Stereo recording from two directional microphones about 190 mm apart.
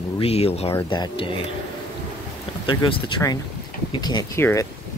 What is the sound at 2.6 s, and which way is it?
Speech, 25° left (ahead or behind).